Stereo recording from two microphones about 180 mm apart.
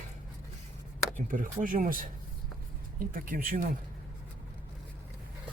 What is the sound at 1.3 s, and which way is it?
Speech, 50° right (ahead or behind).